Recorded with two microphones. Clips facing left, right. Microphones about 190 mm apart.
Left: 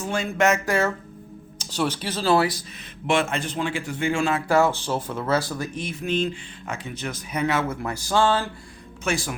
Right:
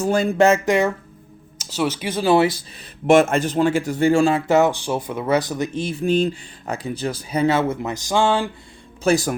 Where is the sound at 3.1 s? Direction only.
45° right (ahead or behind); by 8.4 s 15° right (ahead or behind).